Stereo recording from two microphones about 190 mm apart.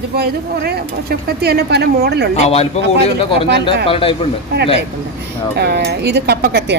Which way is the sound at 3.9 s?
30° left (ahead or behind).